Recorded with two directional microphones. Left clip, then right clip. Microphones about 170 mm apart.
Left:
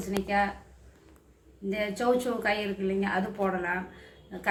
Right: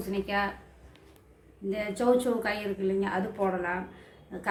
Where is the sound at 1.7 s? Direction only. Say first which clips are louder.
Right 1 dB; 15° right (ahead or behind).